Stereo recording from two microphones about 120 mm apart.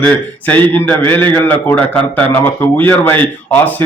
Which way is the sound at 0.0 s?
15° left (ahead or behind).